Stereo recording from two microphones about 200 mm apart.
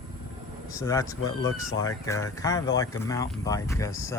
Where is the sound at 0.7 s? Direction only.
15° left (ahead or behind).